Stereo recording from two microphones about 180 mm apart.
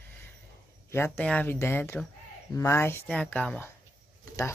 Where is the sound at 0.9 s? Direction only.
10° left (ahead or behind).